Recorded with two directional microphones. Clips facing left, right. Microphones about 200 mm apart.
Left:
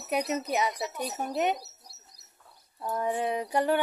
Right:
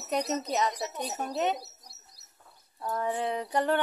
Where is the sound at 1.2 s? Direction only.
15° left (ahead or behind).